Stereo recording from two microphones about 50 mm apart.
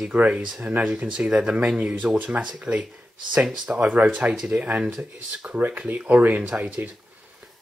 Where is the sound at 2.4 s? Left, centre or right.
Centre.